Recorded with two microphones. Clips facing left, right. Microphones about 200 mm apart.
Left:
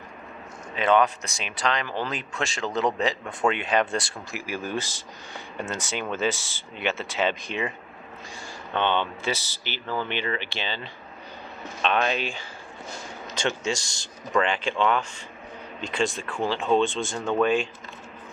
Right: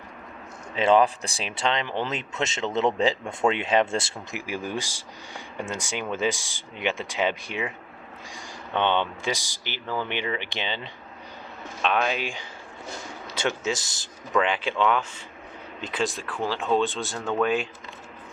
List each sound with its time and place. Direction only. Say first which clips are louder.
0.8 s speech: right 2 dB; 30° right (ahead or behind); by 7.7 s 10° right (ahead or behind)
8.7 s speech: right 1 dB; 15° right (ahead or behind)
11.8 s speech: even; 10° right (ahead or behind)